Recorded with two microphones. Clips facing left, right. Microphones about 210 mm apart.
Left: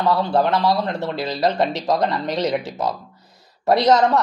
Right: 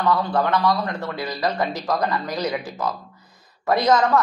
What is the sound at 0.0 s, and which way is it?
Speech, 25° left (ahead or behind).